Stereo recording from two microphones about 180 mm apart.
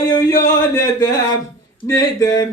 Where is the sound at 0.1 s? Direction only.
20° left (ahead or behind).